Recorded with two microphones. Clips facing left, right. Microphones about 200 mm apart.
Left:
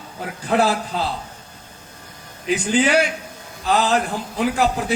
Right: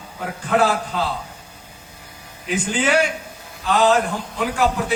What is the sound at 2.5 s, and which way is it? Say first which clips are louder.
Speech: left 2 dB; 40° left (ahead or behind).